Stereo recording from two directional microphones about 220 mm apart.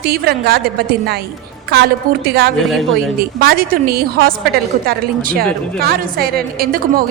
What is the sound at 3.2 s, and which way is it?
A woman's voice, 45° right (ahead or behind).